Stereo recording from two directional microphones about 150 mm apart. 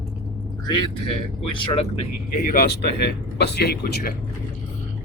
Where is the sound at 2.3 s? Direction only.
70° left (ahead or behind); by 4.0 s 90° left.